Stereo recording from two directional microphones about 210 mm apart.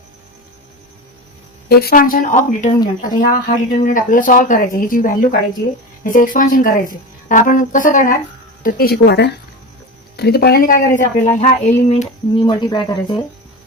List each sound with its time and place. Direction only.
1.7 s speech: 45° left (ahead or behind)
12.4 s speech: 20° left (ahead or behind)